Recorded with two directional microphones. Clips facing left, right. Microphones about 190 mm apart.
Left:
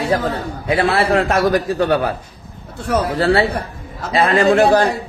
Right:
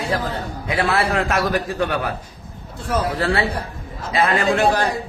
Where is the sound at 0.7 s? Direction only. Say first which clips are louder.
Left 5 dB; 30° left (ahead or behind).